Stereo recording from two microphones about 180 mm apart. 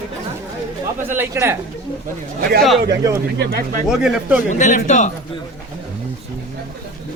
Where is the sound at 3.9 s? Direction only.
5° right (ahead or behind).